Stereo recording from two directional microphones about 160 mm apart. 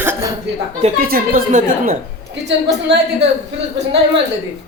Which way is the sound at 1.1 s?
60° right (ahead or behind).